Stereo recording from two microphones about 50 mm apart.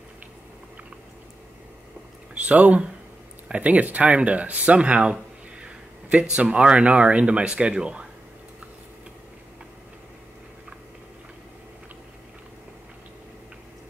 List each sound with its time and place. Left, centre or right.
2.3 s speech: right